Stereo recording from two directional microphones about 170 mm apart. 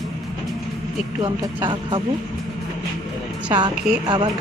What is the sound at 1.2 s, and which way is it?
Speech, 30° right (ahead or behind).